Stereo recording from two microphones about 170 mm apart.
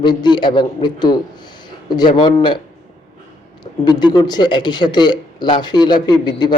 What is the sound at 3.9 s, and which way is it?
A man's voice, 25° left (ahead or behind).